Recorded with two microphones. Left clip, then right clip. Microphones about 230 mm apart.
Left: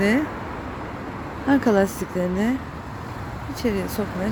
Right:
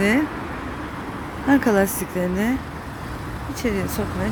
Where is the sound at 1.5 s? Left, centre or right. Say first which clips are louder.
Right 1 dB; centre.